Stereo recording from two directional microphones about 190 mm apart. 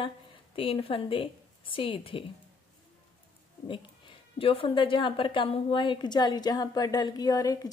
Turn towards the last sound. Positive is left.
turn(degrees=20)  # may be behind; listen again after turning